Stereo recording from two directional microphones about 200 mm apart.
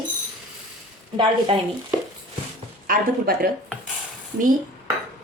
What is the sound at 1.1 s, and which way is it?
Speech, 25° right (ahead or behind).